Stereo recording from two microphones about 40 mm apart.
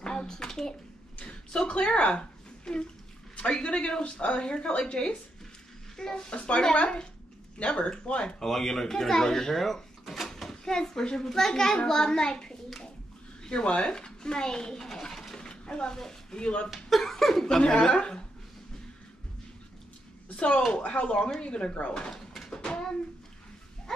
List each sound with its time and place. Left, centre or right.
0.0 s speech: centre
1.1 s a sound: left
1.7 s a woman's voice: left; by 6.3 s centre
6.3 s a child's voice: left
8.4 s speech: centre
10.5 s a child's voice: centre
15.3 s speech: left
16.7 s speech: centre
20.3 s a child's voice: left
22.1 s a sound: centre
22.5 s a sound: centre